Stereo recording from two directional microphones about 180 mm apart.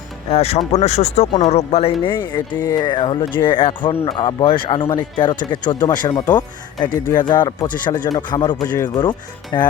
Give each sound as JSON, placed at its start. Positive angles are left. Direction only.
{"t": 0.3, "sound": "speech", "side_deg": 35}